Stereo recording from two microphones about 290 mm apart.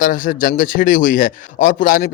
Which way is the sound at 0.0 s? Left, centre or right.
Left.